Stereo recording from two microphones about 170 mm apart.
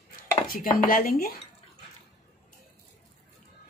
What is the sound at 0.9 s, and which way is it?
Dishes, 60° left (ahead or behind).